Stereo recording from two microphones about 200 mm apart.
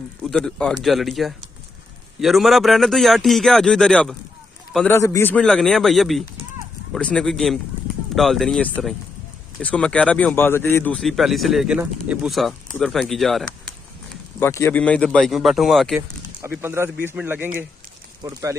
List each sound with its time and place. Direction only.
0.2 s speech: centre (ahead or behind)
14.4 s speech: 10° left (ahead or behind)
16.3 s speech: 10° right (ahead or behind)